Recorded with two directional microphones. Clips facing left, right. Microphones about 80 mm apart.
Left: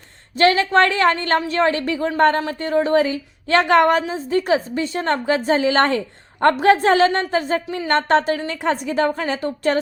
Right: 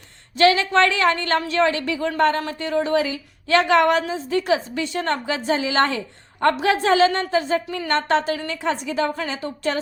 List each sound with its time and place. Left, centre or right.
0.3 s speech: left